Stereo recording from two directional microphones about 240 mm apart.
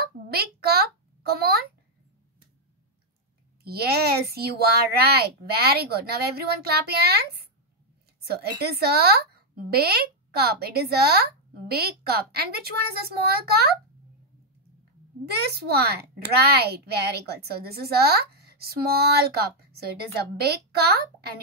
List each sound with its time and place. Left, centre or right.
0.0 s a sound: right
3.6 s speech: right
8.5 s speech: right
15.4 s speech: right